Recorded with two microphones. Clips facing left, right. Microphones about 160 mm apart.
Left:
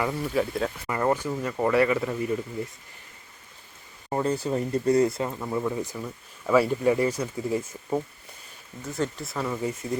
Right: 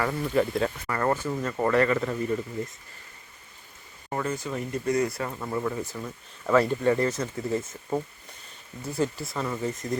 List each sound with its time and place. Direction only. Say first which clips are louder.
0.0 s speech: right 1 dB; 5° left (ahead or behind)
0.9 s speech: left 1 dB; 15° left (ahead or behind)
4.1 s speech: left 4 dB; 30° left (ahead or behind)
5.3 s speech: left 1 dB; 5° left (ahead or behind)
8.8 s speech: right 1 dB; 10° right (ahead or behind)
9.2 s speech: left 1 dB; 5° left (ahead or behind)